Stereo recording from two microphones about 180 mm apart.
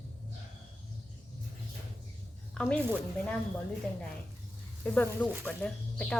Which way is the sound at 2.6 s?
5° left (ahead or behind).